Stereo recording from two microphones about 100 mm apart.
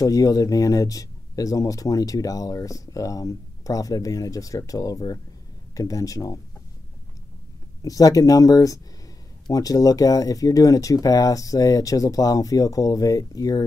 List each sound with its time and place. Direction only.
0.0 s speech: 35° left (ahead or behind)
7.8 s speech: 35° left (ahead or behind)